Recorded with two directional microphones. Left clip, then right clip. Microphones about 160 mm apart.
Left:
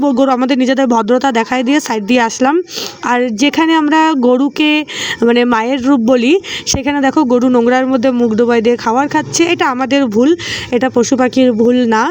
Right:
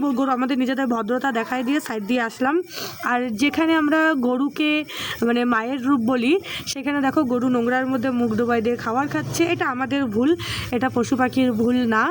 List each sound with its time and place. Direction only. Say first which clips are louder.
0.0 s speech: left 10 dB; 30° left (ahead or behind)
8.1 s speech: left 10 dB; 30° left (ahead or behind)